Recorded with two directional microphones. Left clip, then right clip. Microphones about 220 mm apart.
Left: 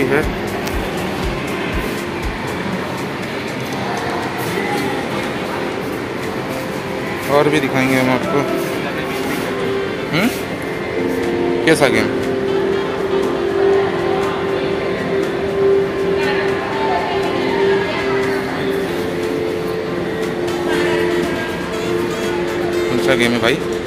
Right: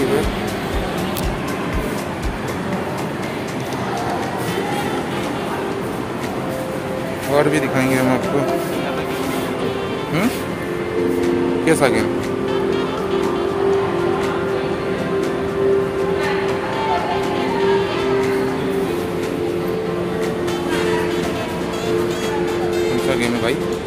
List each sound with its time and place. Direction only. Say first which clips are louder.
7.3 s speech: left 2 dB; centre (ahead or behind)
11.6 s speech: left 3 dB; 5° right (ahead or behind)
23.0 s speech: left 4 dB; 5° left (ahead or behind)